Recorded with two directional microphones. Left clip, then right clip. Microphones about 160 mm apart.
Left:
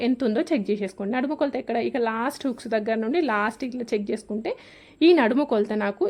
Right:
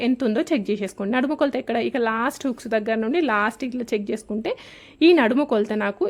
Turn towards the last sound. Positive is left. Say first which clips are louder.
# right 2 dB
turn(degrees=-5)  # may be behind; listen again after turning